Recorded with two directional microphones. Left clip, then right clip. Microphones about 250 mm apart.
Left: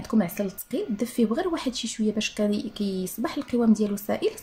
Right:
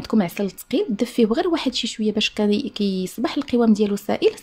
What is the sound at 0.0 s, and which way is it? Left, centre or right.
Speech, right.